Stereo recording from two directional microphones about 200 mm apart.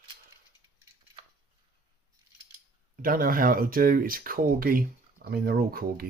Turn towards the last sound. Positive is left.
turn(degrees=-45)  # may be behind; listen again after turning